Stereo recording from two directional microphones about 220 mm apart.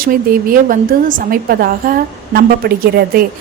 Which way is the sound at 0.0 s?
40° right (ahead or behind).